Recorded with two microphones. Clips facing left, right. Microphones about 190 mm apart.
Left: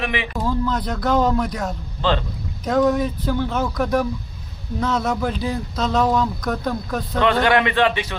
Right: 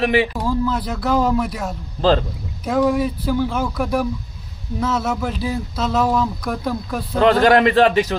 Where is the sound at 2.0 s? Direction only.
40° right (ahead or behind).